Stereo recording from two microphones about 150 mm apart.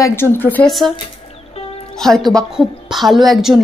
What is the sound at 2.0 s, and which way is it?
A woman's voice, centre (ahead or behind).